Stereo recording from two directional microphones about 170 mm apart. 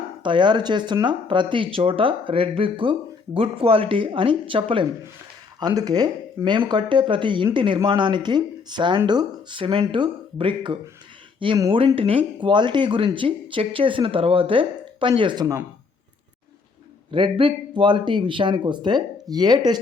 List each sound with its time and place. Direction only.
0.2 s speech: 30° right (ahead or behind)
17.1 s speech: 30° right (ahead or behind)